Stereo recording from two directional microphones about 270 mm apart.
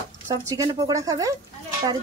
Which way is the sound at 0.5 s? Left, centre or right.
Centre.